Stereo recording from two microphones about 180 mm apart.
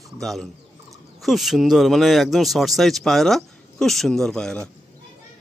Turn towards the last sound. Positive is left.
turn(degrees=5)  # may be behind; listen again after turning